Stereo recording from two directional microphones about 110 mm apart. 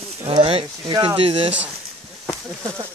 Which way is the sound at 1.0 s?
55° right (ahead or behind).